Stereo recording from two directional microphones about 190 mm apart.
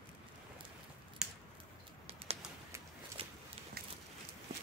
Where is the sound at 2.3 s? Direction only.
30° right (ahead or behind).